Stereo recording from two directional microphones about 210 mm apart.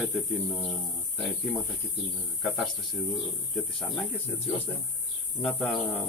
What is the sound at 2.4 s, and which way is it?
Speech, centre (ahead or behind).